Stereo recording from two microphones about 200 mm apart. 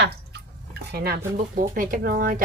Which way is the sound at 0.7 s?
55° right (ahead or behind).